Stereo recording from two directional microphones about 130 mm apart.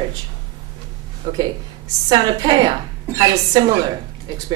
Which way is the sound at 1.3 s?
40° right (ahead or behind).